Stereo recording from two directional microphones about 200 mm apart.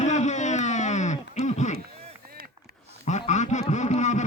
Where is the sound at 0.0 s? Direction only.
35° left (ahead or behind).